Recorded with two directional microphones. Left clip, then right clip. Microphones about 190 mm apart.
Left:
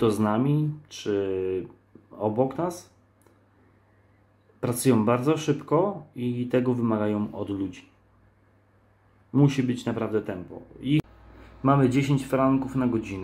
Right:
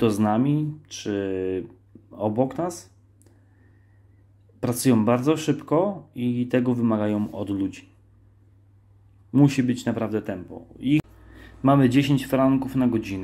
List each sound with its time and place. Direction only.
0.0 s speech: 30° right (ahead or behind)
4.6 s speech: 30° right (ahead or behind)
9.4 s speech: 35° right (ahead or behind)
11.6 s speech: 40° right (ahead or behind)